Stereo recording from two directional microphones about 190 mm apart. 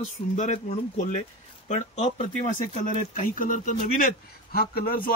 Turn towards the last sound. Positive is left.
turn(degrees=50)  # may be behind; listen again after turning